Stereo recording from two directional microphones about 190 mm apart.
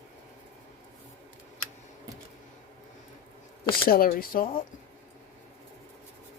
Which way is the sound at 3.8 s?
50° left (ahead or behind).